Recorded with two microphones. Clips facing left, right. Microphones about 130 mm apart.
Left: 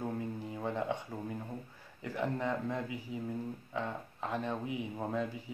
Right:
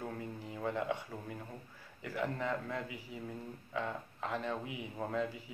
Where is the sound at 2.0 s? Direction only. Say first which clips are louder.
Left 2 dB; 20° left (ahead or behind).